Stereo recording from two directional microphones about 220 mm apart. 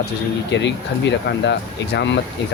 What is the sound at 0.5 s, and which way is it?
Speech, 55° left (ahead or behind).